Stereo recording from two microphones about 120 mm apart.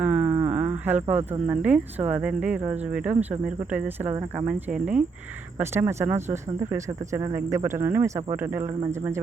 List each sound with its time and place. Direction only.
0.0 s a sound: 10° right (ahead or behind)
1.5 s speech: 10° right (ahead or behind)
4.1 s speech: 25° right (ahead or behind)
4.4 s speech: 10° right (ahead or behind)